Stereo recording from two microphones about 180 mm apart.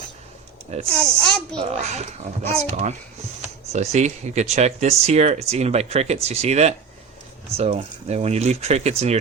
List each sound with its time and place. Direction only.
0.9 s a child's voice: 5° left (ahead or behind)
1.5 s speech: 40° right (ahead or behind)